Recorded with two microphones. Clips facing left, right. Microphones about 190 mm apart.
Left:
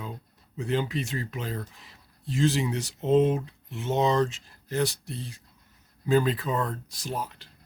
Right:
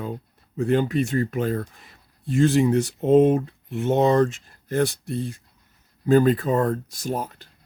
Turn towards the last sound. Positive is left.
turn(degrees=-50)  # may be behind; listen again after turning